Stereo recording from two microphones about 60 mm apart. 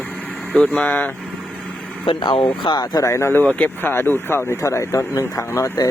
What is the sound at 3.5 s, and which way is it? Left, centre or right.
Speech, left.